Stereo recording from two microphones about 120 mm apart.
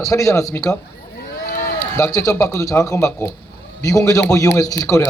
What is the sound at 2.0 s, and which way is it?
A man's voice, 30° left (ahead or behind).